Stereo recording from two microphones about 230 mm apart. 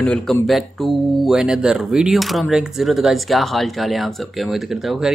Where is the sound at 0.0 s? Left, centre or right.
Centre.